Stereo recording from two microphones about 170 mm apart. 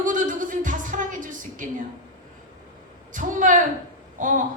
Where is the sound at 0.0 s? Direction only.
50° right (ahead or behind).